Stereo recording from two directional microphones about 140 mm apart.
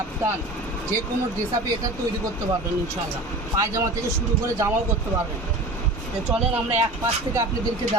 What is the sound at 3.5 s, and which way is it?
Speech, 25° right (ahead or behind).